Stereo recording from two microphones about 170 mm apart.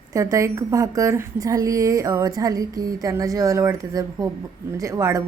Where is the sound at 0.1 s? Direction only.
20° right (ahead or behind).